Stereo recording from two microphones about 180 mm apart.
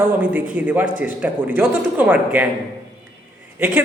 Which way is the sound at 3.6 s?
10° right (ahead or behind).